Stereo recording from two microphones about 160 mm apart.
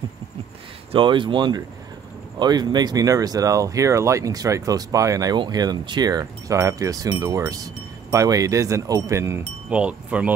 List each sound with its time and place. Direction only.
0.9 s speech: 30° right (ahead or behind); by 10.3 s 10° right (ahead or behind)